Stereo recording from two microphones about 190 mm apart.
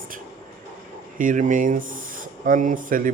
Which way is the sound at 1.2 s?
45° right (ahead or behind).